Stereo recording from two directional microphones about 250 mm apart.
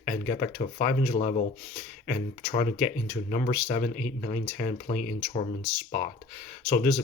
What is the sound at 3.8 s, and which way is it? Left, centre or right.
Speech, centre.